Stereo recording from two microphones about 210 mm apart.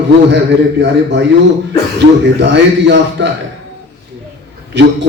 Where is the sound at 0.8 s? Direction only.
55° right (ahead or behind).